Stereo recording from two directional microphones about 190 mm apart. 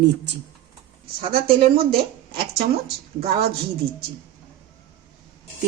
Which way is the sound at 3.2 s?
55° right (ahead or behind).